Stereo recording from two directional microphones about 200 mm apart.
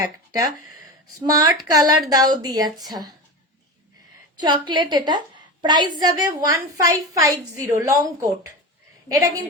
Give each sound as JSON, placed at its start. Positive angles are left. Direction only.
{"t": 0.0, "sound": "a woman's voice", "side_deg": -15}
{"t": 4.4, "sound": "a woman's voice", "side_deg": -20}